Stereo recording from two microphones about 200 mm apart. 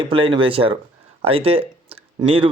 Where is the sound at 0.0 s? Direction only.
25° right (ahead or behind).